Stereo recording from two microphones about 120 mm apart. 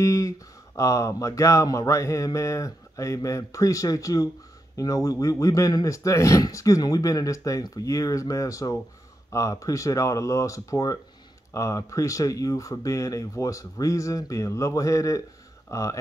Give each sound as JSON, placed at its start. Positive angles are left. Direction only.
{"t": 0.0, "sound": "speech", "side_deg": 25}